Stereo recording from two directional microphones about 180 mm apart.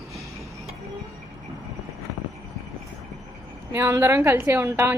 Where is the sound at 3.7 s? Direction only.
15° right (ahead or behind).